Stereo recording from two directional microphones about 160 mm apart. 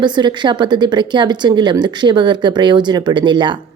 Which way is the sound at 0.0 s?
30° right (ahead or behind).